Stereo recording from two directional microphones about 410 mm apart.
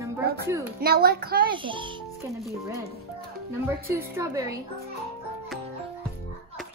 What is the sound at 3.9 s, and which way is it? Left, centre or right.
Speech, centre.